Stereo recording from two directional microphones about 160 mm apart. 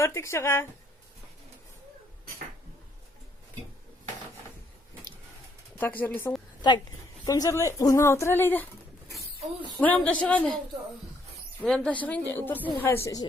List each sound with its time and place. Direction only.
0.0 s speech: 20° left (ahead or behind)
5.8 s speech: 10° left (ahead or behind)
9.7 s speech: 10° left (ahead or behind)
11.6 s speech: 5° left (ahead or behind)